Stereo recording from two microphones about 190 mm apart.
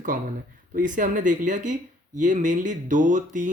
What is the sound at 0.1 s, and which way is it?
Speech, 45° right (ahead or behind).